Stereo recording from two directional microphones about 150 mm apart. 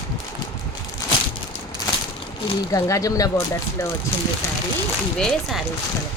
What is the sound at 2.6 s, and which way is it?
Speech, 20° left (ahead or behind).